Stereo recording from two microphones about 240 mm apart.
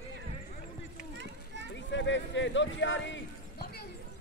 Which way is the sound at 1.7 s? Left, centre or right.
Left.